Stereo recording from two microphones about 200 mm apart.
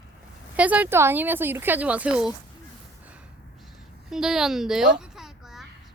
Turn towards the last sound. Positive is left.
turn(degrees=0)  # may be behind; listen again after turning